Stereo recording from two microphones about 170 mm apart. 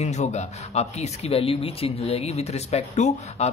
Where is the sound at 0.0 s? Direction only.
45° left (ahead or behind).